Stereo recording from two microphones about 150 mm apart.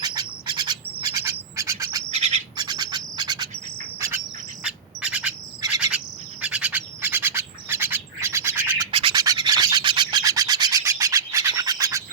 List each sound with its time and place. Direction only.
0.0 s bird: 25° right (ahead or behind)
2.1 s bird: 45° right (ahead or behind)
2.6 s bird: 25° right (ahead or behind)
4.6 s insect: 5° right (ahead or behind)
6.4 s bird: 5° right (ahead or behind)
8.9 s rub: 35° right (ahead or behind)
9.2 s a sound: 25° right (ahead or behind)